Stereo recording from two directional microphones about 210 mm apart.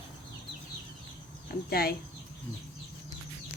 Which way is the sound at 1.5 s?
45° left (ahead or behind).